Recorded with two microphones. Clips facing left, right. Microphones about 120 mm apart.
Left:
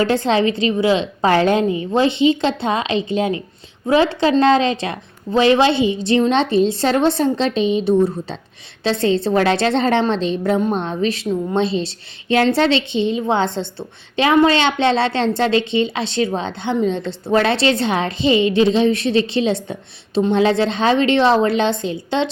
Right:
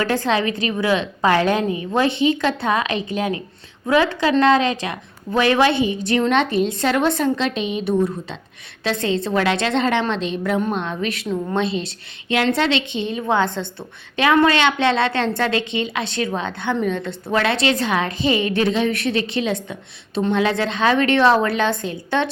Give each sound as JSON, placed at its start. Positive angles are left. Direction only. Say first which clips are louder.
{"t": 0.0, "sound": "a woman's voice", "louder": "left 4 dB", "side_deg": 25}